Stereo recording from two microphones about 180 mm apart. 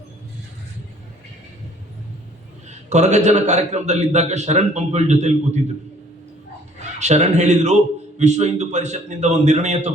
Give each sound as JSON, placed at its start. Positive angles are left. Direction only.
{"t": 2.6, "sound": "a man's voice", "side_deg": -40}
{"t": 7.0, "sound": "a man's voice", "side_deg": -40}